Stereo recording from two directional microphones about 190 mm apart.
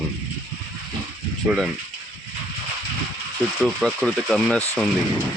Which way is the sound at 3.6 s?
Centre (ahead or behind).